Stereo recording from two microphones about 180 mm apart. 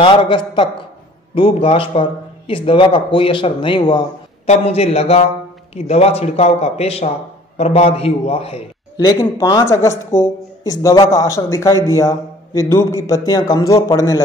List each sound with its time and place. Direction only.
0.0 s a man's voice: 25° left (ahead or behind)
8.9 s speech: 20° left (ahead or behind)